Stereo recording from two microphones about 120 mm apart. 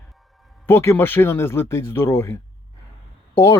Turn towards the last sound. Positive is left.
turn(degrees=20)  # may be behind; listen again after turning